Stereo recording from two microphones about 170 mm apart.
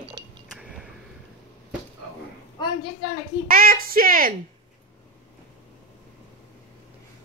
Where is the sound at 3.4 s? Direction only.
60° right (ahead or behind).